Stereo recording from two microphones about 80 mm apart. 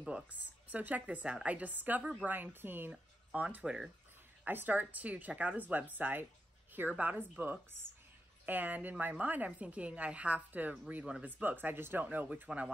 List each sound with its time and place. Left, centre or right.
0.0 s speech: centre